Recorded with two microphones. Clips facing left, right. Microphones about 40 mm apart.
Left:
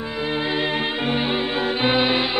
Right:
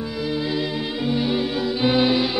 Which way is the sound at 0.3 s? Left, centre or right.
Left.